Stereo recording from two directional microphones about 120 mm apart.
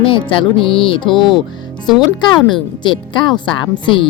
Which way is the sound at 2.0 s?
40° left (ahead or behind).